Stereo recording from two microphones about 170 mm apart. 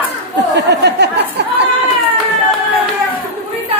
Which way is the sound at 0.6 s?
85° right.